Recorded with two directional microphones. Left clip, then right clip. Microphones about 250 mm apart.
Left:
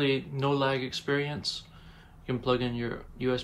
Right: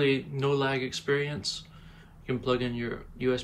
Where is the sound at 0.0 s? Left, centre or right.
Centre.